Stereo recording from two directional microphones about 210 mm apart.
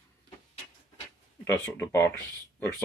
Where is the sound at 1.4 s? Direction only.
10° left (ahead or behind).